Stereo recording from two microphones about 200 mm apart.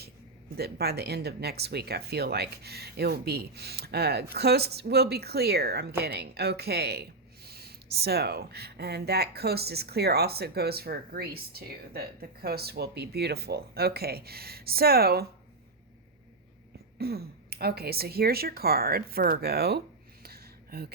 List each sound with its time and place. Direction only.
0.5 s a woman's voice: 50° right (ahead or behind)
17.0 s a woman's voice: 50° right (ahead or behind)
20.2 s a sound: 50° right (ahead or behind)